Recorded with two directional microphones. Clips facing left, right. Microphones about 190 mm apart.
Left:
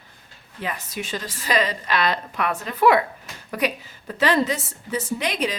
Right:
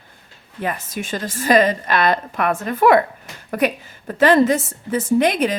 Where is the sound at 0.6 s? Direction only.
50° right (ahead or behind).